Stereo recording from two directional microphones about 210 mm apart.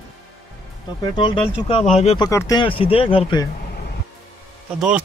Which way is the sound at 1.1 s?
25° left (ahead or behind).